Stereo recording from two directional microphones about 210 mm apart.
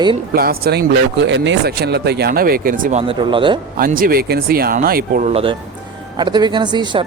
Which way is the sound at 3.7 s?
40° right (ahead or behind).